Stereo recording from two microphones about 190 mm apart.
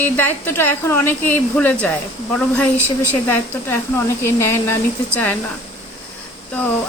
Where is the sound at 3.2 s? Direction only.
10° left (ahead or behind).